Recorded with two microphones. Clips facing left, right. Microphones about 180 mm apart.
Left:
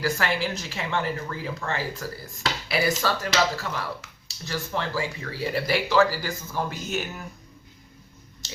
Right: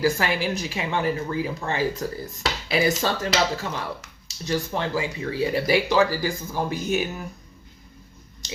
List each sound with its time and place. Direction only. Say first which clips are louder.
0.0 s speech: right 3 dB; 15° right (ahead or behind)